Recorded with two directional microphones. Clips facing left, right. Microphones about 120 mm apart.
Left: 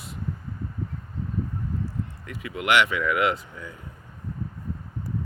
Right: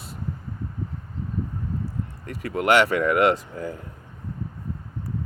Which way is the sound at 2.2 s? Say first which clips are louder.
Right 5 dB; 40° right (ahead or behind).